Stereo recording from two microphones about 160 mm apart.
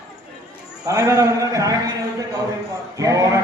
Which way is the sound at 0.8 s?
20° right (ahead or behind).